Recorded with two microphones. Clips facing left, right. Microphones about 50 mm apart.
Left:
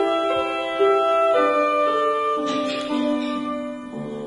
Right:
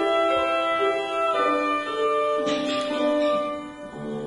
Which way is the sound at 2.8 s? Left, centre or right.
Centre.